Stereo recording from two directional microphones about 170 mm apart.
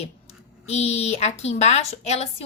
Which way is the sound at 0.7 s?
40° left (ahead or behind).